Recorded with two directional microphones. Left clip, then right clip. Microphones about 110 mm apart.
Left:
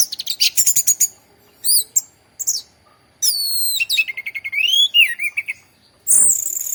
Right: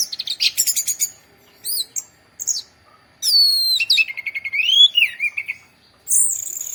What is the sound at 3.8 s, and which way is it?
Bird, 35° left (ahead or behind).